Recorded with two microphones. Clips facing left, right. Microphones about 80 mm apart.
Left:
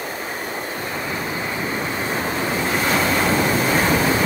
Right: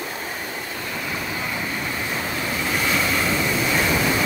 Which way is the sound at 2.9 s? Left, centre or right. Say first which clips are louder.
Left 4 dB; left.